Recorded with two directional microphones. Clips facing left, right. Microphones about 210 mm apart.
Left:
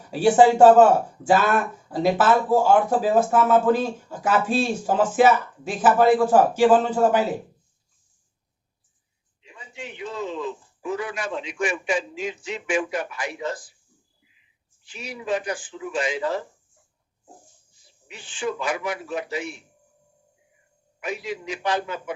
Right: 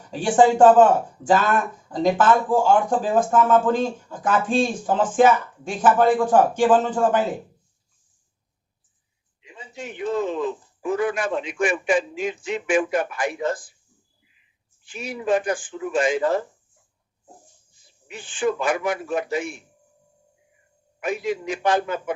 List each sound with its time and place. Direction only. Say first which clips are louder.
0.1 s speech: left 1 dB; 10° left (ahead or behind)
9.7 s speech: right 7 dB; 50° right (ahead or behind)
14.8 s speech: right 5 dB; 50° right (ahead or behind)
18.1 s speech: right 5 dB; 50° right (ahead or behind)
21.0 s speech: right 5 dB; 50° right (ahead or behind)